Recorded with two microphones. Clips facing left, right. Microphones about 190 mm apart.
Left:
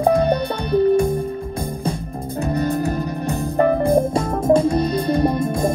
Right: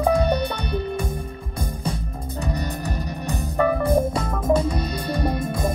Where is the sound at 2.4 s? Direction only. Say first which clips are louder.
Left 9 dB; 55° left (ahead or behind).